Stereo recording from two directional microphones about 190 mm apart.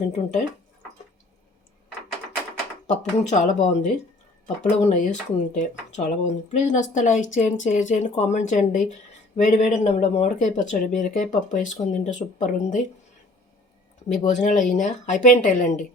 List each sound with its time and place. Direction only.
0.1 s speech: 35° left (ahead or behind)
3.0 s speech: 35° left (ahead or behind)
14.1 s speech: 40° left (ahead or behind)